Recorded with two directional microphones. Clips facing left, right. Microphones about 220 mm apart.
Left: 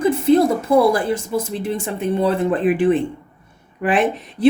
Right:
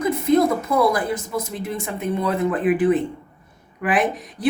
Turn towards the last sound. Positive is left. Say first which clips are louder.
# left 6 dB
turn(degrees=30)  # may be behind; listen again after turning